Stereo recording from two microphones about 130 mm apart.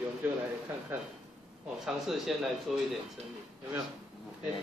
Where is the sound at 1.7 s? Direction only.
5° right (ahead or behind).